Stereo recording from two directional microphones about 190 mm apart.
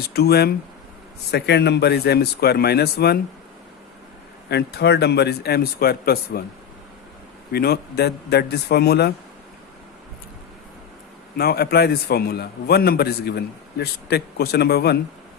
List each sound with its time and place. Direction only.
0.1 s a man's voice: 55° left (ahead or behind)
4.4 s a man's voice: 60° left (ahead or behind)
7.5 s a man's voice: 55° left (ahead or behind)
11.3 s a man's voice: 55° left (ahead or behind)